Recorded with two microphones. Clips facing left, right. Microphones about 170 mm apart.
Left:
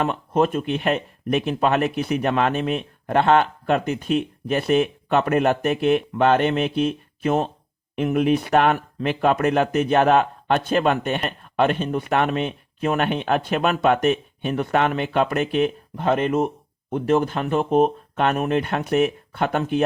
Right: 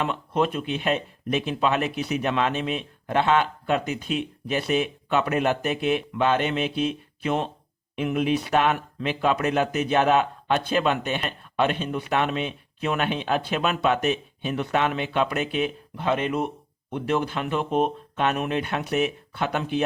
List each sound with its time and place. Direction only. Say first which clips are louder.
0.0 s speech: left 4 dB; 45° left (ahead or behind)